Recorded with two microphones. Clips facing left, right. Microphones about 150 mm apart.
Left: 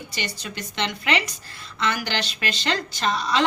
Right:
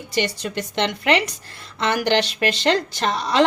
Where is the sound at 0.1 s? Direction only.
65° right (ahead or behind).